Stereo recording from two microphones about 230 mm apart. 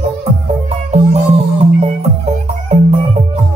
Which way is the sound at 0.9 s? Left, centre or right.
Right.